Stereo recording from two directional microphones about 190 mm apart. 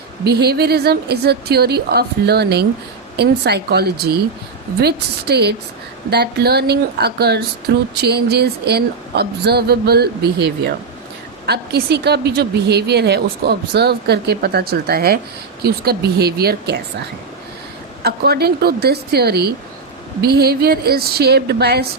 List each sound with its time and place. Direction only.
0.3 s a woman's voice: 55° right (ahead or behind)
18.0 s a woman's voice: 55° right (ahead or behind)